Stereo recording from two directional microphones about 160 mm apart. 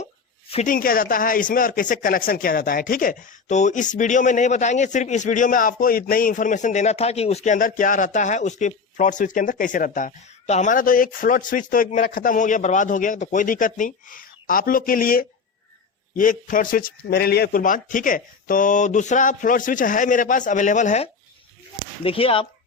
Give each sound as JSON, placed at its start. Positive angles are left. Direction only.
{"t": 0.7, "sound": "speech", "side_deg": 65}
{"t": 22.0, "sound": "speech", "side_deg": 35}